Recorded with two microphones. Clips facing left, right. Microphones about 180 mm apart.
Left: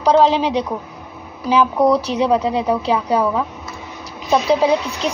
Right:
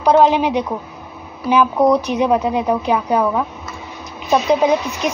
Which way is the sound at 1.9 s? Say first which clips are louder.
Right 1 dB; 15° right (ahead or behind).